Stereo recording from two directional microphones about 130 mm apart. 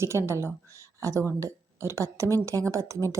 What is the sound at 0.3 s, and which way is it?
A woman's voice, 20° right (ahead or behind).